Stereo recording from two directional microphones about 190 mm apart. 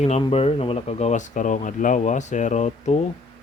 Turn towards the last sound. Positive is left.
turn(degrees=35)  # may be behind; listen again after turning